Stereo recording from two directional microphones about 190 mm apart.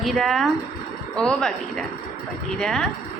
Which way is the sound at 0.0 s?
Centre (ahead or behind).